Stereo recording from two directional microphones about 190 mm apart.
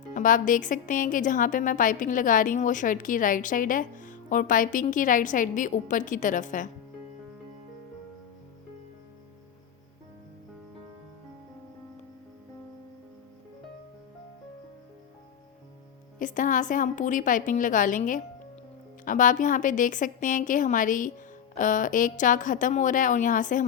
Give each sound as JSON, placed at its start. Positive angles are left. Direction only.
{"t": 0.1, "sound": "a woman's voice", "side_deg": 45}
{"t": 16.1, "sound": "a woman's voice", "side_deg": 45}